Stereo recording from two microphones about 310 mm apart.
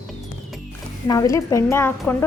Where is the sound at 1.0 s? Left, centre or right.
Centre.